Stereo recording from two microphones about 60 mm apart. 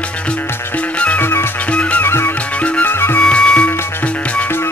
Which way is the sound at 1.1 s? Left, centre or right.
Left.